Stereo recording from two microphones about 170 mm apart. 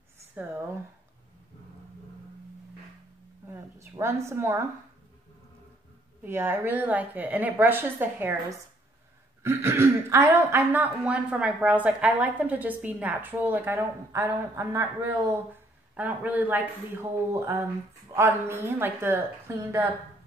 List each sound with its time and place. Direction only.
0.4 s speech: 10° right (ahead or behind)
3.4 s a sound: 15° right (ahead or behind)
6.2 s a woman's voice: 10° right (ahead or behind)